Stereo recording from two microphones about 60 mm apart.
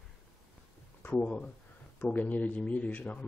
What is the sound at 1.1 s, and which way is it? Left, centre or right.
Speech, centre.